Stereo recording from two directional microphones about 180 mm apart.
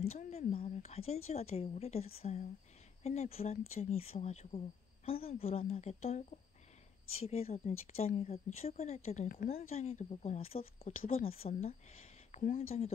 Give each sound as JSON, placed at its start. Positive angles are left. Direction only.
{"t": 0.1, "sound": "a woman's voice", "side_deg": 35}
{"t": 9.7, "sound": "a woman's voice", "side_deg": 35}
{"t": 11.0, "sound": "a woman's voice", "side_deg": 50}
{"t": 11.2, "sound": "a woman's voice", "side_deg": 35}